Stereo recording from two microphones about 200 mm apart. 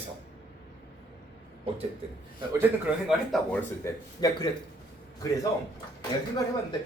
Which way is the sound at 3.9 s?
20° left (ahead or behind).